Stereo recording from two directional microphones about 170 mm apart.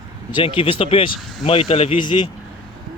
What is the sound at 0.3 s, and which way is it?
Speech, 30° left (ahead or behind).